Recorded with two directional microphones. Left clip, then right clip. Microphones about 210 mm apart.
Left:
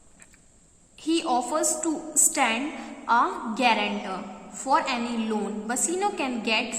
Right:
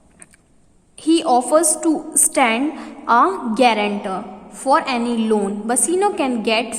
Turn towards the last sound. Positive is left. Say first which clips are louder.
# right 7 dB
turn(degrees=-45)  # may be behind; listen again after turning